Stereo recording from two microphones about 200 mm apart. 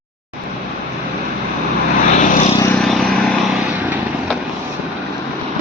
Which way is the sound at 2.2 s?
40° left (ahead or behind).